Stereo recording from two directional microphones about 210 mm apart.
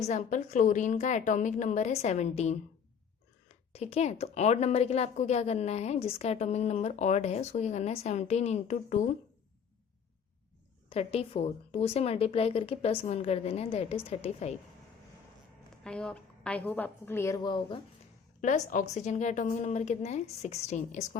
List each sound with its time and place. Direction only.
0.0 s speech: 35° left (ahead or behind)
10.8 s a woman's voice: 30° left (ahead or behind)
15.8 s a woman's voice: 5° left (ahead or behind); by 17.7 s 20° left (ahead or behind)
18.4 s speech: 40° left (ahead or behind)